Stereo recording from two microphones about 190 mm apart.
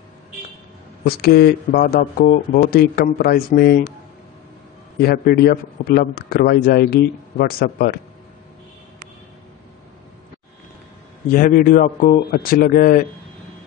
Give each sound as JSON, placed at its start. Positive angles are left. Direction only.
{"t": 1.0, "sound": "a man's voice", "side_deg": 55}
{"t": 5.0, "sound": "a man's voice", "side_deg": 55}
{"t": 11.3, "sound": "a man's voice", "side_deg": 45}